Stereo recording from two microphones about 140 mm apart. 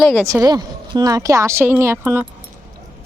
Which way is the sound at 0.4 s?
30° right (ahead or behind).